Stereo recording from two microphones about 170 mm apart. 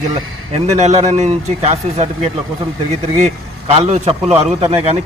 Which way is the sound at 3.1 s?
40° right (ahead or behind).